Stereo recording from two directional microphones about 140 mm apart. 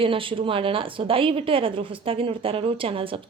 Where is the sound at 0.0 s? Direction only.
40° right (ahead or behind).